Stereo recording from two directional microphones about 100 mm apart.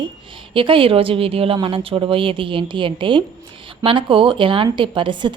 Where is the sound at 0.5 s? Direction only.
60° right (ahead or behind).